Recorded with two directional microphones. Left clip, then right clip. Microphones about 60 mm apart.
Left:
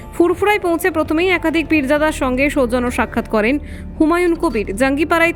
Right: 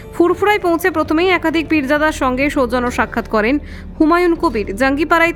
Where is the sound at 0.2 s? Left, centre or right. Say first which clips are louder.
Right 1 dB; left.